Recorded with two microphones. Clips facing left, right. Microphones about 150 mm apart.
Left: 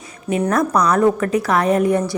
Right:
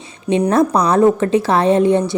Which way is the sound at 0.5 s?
30° right (ahead or behind).